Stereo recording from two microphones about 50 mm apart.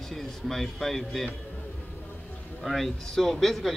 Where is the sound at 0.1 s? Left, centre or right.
Centre.